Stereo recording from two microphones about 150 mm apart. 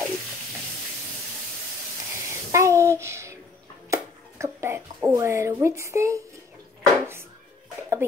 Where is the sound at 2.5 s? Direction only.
20° right (ahead or behind).